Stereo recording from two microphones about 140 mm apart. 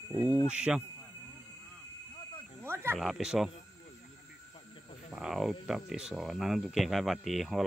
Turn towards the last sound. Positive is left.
turn(degrees=0)  # may be behind; listen again after turning